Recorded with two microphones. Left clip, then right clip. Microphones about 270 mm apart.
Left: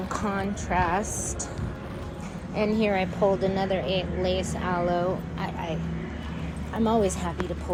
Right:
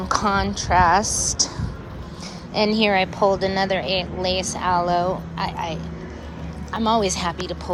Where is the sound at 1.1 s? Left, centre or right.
Centre.